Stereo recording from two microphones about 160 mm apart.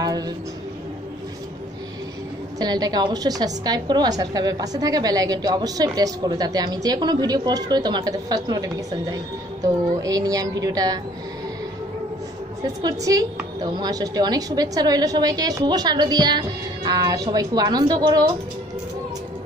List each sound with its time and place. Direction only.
2.6 s a woman's voice: 25° right (ahead or behind)
12.8 s a woman's voice: 25° right (ahead or behind)